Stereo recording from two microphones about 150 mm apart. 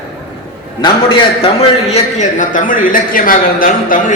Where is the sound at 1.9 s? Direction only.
55° left (ahead or behind).